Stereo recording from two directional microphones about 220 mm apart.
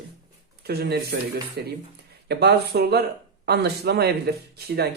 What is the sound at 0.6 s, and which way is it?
Speech, 45° right (ahead or behind).